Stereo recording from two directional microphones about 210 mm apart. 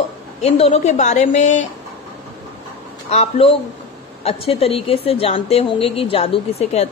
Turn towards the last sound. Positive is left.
turn(degrees=30)  # may be behind; listen again after turning